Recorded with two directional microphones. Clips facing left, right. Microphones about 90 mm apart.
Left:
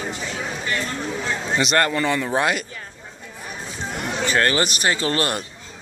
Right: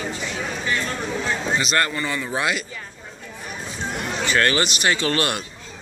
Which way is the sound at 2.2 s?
45° left (ahead or behind).